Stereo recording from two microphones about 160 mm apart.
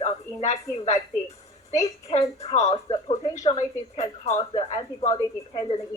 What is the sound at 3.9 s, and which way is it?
Speech, 45° left (ahead or behind).